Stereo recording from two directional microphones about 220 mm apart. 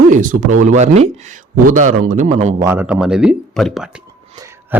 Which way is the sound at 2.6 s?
10° right (ahead or behind).